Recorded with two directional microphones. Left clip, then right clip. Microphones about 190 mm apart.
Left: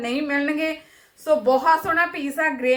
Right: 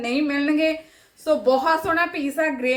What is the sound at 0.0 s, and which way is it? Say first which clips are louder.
A woman's voice: right 1 dB; 20° right (ahead or behind).